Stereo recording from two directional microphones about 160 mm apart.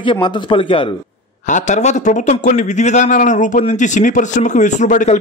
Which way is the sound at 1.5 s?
50° left (ahead or behind).